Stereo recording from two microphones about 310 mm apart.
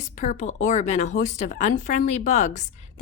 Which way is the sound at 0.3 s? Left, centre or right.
Left.